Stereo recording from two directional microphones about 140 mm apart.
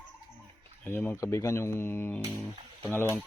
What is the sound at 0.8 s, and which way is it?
Speech, 10° left (ahead or behind).